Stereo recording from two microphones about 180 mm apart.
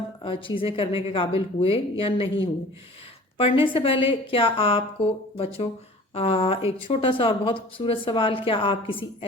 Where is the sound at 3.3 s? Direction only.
30° left (ahead or behind).